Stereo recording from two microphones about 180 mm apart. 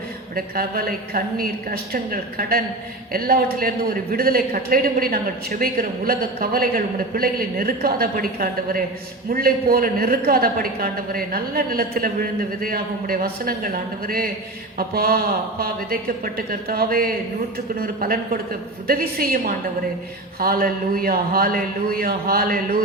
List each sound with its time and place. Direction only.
0.3 s a woman's voice: 55° right (ahead or behind)